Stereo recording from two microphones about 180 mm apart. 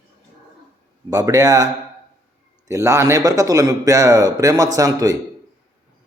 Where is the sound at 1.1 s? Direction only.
20° right (ahead or behind).